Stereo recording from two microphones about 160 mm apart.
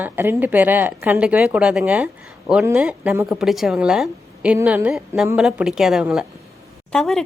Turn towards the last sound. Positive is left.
turn(degrees=0)  # may be behind; listen again after turning